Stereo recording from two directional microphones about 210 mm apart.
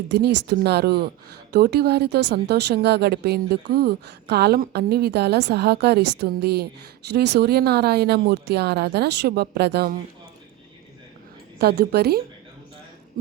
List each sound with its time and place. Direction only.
0.1 s speech: 50° right (ahead or behind)
11.6 s speech: 50° right (ahead or behind)